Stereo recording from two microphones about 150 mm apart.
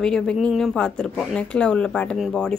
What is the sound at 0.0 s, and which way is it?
A woman's voice, 5° left (ahead or behind).